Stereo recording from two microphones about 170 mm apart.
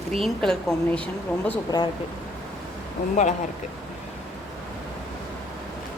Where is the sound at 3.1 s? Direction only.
45° left (ahead or behind).